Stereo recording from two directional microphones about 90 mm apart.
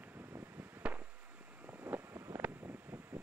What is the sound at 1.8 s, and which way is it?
Vehicle, 25° right (ahead or behind).